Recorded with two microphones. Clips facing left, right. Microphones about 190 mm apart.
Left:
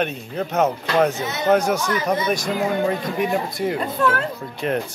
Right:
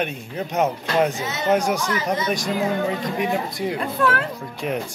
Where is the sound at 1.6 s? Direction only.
15° right (ahead or behind).